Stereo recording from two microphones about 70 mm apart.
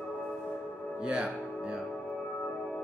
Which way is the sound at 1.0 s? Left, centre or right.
Centre.